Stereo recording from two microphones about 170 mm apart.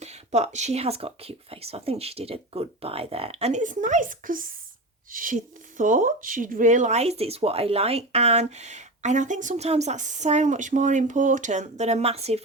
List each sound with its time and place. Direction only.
0.0 s speech: 40° right (ahead or behind)